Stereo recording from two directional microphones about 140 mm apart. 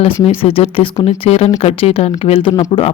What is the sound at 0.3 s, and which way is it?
Speech, 40° left (ahead or behind).